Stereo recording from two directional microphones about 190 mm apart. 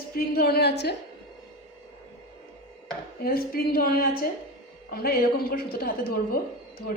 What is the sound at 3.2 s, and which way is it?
A woman's voice, 50° left (ahead or behind).